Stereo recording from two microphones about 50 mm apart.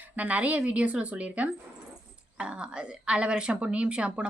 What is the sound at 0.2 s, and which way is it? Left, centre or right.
A woman's voice, right.